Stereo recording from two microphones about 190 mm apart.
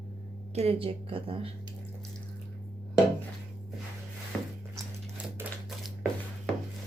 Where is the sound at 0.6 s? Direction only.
30° right (ahead or behind).